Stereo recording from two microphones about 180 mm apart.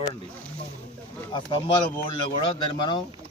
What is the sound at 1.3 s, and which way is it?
Speech, 25° left (ahead or behind).